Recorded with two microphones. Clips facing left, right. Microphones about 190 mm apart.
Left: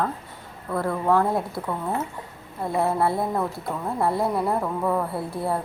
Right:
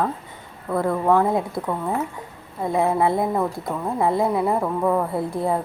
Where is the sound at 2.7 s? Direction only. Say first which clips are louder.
Right 3 dB; 15° right (ahead or behind).